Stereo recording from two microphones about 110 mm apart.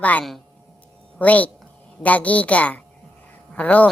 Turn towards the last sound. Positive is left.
turn(degrees=10)  # may be behind; listen again after turning